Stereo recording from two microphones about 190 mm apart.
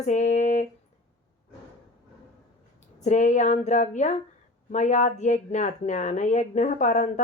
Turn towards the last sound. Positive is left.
turn(degrees=40)  # may be behind; listen again after turning